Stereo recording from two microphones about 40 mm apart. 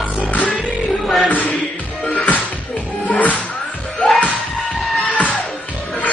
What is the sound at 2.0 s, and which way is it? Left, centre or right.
Music, left.